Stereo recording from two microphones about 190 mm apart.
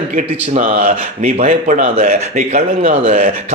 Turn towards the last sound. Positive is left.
turn(degrees=-40)  # may be behind; listen again after turning